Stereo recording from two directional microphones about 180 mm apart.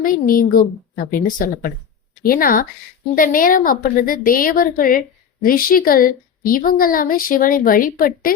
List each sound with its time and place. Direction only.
0.0 s a woman's voice: 50° left (ahead or behind)